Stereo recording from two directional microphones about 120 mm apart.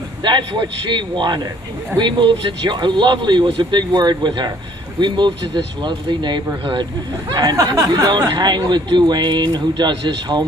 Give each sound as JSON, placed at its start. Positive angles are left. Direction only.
{"t": 0.2, "sound": "speech", "side_deg": -40}
{"t": 7.5, "sound": "speech", "side_deg": -25}